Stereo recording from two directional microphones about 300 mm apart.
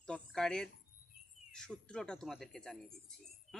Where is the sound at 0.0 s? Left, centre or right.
Centre.